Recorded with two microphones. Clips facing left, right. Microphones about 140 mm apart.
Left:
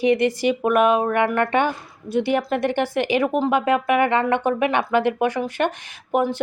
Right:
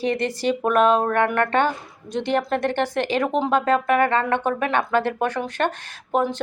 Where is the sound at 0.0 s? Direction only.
15° left (ahead or behind).